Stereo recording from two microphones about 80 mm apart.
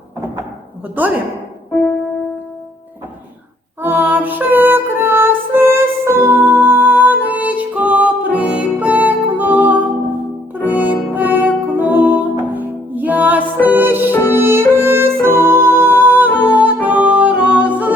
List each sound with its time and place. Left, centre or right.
3.8 s music: right